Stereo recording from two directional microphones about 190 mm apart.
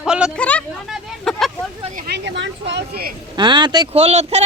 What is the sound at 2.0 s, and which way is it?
Vehicle, 60° right (ahead or behind).